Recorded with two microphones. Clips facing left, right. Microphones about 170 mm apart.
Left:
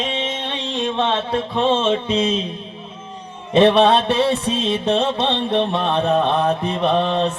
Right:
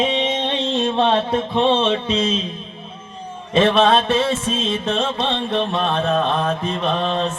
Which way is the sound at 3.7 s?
65° left (ahead or behind).